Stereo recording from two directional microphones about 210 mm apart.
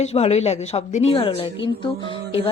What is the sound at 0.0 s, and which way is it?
A woman's voice, 30° left (ahead or behind).